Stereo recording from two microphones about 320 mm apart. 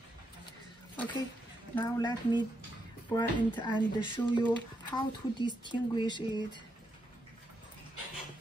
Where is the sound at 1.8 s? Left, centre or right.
Centre.